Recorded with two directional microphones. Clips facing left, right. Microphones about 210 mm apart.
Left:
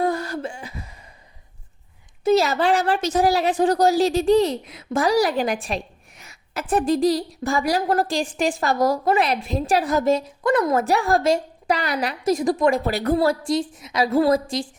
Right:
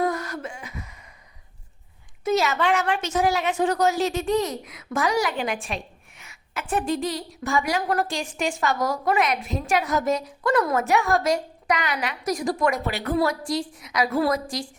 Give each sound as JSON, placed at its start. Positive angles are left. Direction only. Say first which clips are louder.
{"t": 0.0, "sound": "a sound", "louder": "left 3 dB", "side_deg": 30}
{"t": 2.2, "sound": "a woman's voice", "louder": "left 4 dB", "side_deg": 35}
{"t": 12.3, "sound": "a woman's voice", "louder": "left 5 dB", "side_deg": 25}
{"t": 12.8, "sound": "a woman's voice", "louder": "left 4 dB", "side_deg": 35}